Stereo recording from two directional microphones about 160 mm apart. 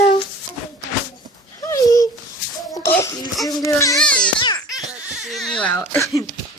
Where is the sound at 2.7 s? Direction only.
15° left (ahead or behind).